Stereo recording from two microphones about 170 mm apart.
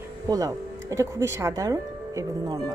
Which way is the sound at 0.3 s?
20° right (ahead or behind).